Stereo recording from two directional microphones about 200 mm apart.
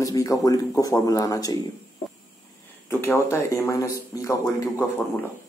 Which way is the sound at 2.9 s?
10° left (ahead or behind).